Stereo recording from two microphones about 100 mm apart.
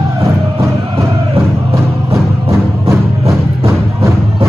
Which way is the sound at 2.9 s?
30° right (ahead or behind).